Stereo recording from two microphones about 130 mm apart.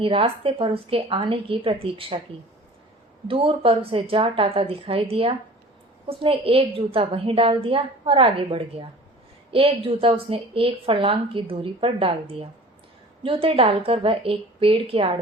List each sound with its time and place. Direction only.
0.0 s a woman's voice: 45° right (ahead or behind)
3.2 s a woman's voice: 45° right (ahead or behind)